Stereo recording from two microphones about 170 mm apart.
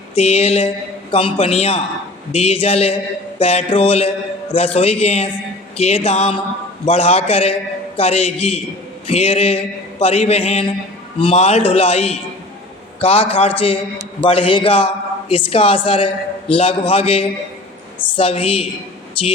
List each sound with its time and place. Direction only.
0.2 s a man's voice: 35° left (ahead or behind)